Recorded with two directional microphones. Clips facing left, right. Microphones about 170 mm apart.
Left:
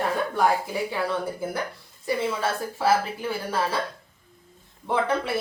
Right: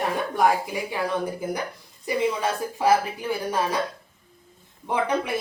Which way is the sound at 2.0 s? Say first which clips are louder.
Right 2 dB; 15° right (ahead or behind).